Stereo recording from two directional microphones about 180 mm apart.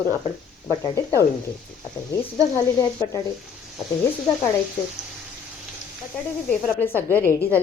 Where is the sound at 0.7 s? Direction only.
15° left (ahead or behind).